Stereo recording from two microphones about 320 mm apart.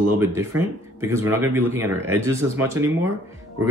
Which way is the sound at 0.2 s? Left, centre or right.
Centre.